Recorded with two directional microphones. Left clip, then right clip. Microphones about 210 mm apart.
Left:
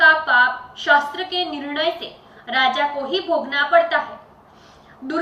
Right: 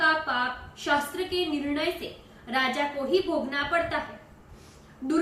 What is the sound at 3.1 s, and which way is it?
Speech, 25° right (ahead or behind).